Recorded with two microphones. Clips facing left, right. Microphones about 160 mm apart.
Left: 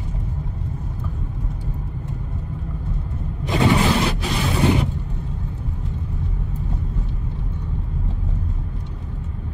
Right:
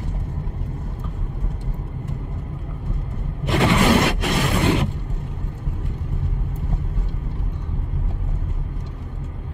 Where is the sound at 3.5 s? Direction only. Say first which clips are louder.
Right 1 dB; 70° right (ahead or behind).